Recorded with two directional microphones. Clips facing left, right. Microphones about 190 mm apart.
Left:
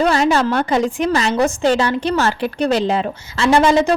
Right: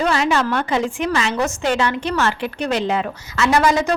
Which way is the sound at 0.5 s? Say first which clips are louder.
Left 3 dB; 40° left (ahead or behind).